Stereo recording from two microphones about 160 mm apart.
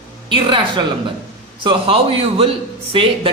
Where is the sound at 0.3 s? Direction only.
30° right (ahead or behind).